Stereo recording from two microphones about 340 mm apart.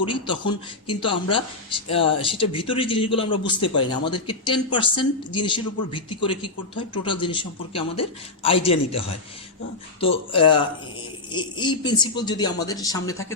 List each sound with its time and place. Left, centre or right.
0.0 s speech: centre
10.3 s speech: centre